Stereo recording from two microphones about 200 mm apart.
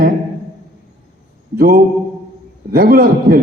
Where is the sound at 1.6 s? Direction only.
50° right (ahead or behind).